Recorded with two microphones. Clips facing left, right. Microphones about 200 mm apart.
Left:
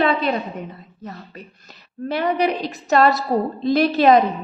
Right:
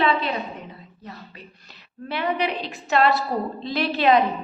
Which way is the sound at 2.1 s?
40° left (ahead or behind).